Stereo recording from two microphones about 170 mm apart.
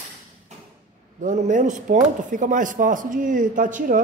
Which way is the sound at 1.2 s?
45° right (ahead or behind).